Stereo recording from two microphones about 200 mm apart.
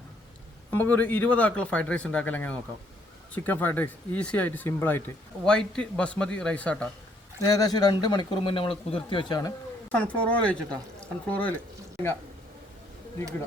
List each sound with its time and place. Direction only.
0.7 s speech: 10° left (ahead or behind)
7.4 s speech: 20° left (ahead or behind)
9.9 s speech: 5° left (ahead or behind)